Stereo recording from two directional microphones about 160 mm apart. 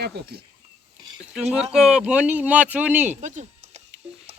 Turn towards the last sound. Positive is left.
turn(degrees=-45)  # may be behind; listen again after turning